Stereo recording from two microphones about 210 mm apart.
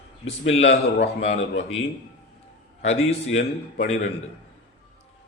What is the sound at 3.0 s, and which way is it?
Speech, 70° left (ahead or behind).